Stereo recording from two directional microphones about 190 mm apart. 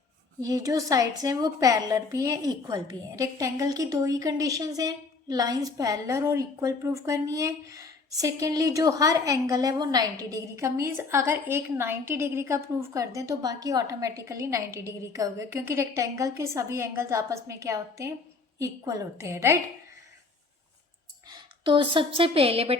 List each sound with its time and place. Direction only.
0.4 s a woman's voice: 20° right (ahead or behind)
21.2 s a woman's voice: 25° right (ahead or behind)